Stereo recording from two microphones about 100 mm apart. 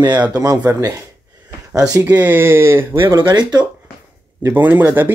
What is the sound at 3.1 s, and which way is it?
Speech, 50° right (ahead or behind).